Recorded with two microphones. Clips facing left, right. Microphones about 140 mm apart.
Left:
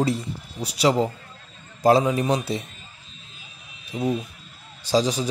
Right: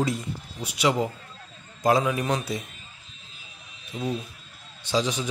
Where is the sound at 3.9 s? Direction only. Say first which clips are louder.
Left 5 dB; 20° left (ahead or behind).